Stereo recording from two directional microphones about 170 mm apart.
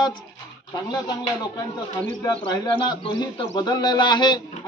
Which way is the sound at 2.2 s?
25° left (ahead or behind).